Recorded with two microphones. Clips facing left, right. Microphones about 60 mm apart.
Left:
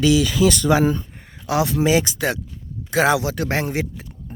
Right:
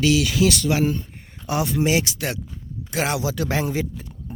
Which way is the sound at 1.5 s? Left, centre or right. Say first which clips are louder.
Left 4 dB; left.